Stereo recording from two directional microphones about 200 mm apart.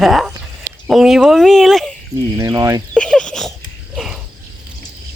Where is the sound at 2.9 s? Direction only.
5° left (ahead or behind).